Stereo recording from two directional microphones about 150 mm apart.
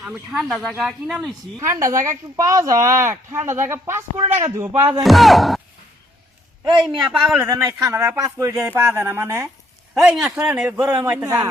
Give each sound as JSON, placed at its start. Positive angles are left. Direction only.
{"t": 0.0, "sound": "speech", "side_deg": -5}
{"t": 1.5, "sound": "speech", "side_deg": -20}
{"t": 4.7, "sound": "speech", "side_deg": -35}
{"t": 5.0, "sound": "speech", "side_deg": 0}
{"t": 6.8, "sound": "speech", "side_deg": -5}
{"t": 7.3, "sound": "a man's voice", "side_deg": -20}
{"t": 10.2, "sound": "speech", "side_deg": -5}